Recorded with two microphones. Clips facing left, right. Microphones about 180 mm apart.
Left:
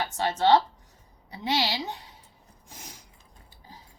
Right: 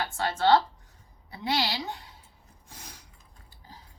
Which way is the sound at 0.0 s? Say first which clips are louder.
Left 1 dB; 20° left (ahead or behind).